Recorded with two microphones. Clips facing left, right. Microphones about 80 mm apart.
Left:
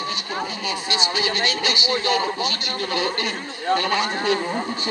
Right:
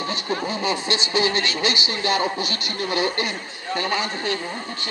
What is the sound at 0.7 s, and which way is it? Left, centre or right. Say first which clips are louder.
A man's voice: even; right.